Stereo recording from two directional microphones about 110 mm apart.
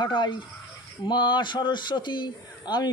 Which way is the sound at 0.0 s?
45° left (ahead or behind).